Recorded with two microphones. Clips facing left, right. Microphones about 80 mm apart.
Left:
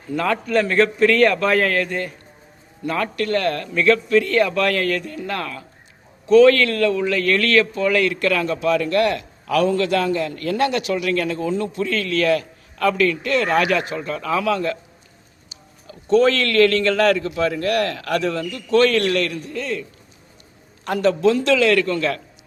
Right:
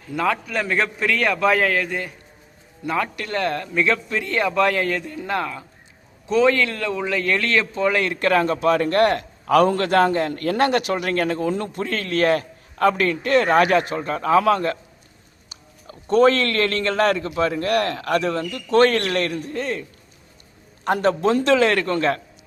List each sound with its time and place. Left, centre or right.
0.1 s a man's voice: centre; by 19.8 s right
20.8 s speech: right